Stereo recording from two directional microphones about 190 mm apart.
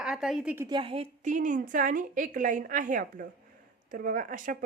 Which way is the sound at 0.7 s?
25° right (ahead or behind).